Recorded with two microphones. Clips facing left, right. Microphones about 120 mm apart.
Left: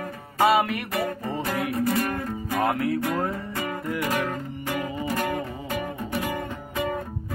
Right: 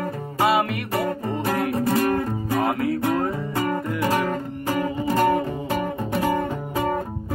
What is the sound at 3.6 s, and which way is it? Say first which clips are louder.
Music: right 4 dB; 35° right (ahead or behind).